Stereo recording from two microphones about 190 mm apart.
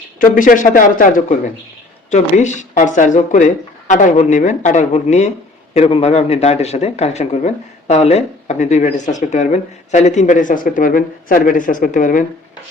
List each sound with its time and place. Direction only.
0.2 s speech: 45° left (ahead or behind)